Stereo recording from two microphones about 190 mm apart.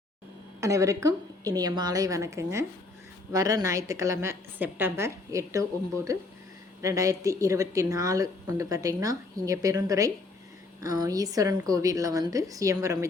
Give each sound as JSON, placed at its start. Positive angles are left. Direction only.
{"t": 0.6, "sound": "a woman's voice", "side_deg": -15}